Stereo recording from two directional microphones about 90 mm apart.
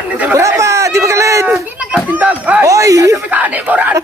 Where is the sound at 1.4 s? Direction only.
15° right (ahead or behind).